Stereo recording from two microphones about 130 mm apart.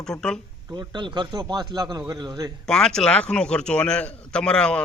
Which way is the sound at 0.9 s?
35° right (ahead or behind).